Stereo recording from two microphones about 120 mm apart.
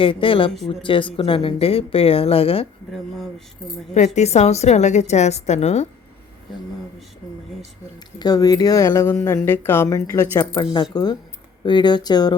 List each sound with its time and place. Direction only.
0.0 s speech: 45° left (ahead or behind)
3.9 s a woman's voice: 75° left (ahead or behind)
7.9 s a woman's voice: 35° left (ahead or behind)